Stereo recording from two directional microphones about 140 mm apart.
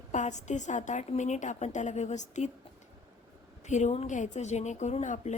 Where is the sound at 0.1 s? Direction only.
55° left (ahead or behind).